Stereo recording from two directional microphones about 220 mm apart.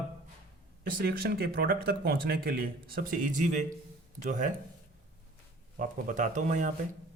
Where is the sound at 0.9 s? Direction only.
40° right (ahead or behind).